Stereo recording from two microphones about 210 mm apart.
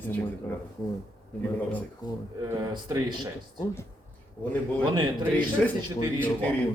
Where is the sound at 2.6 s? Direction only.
20° right (ahead or behind).